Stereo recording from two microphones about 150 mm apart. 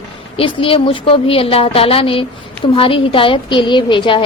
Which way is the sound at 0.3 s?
35° left (ahead or behind).